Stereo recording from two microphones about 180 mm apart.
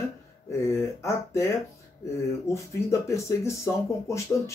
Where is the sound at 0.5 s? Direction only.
15° left (ahead or behind).